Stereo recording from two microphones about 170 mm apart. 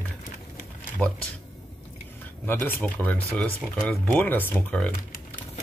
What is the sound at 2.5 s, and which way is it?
Speech, 10° left (ahead or behind).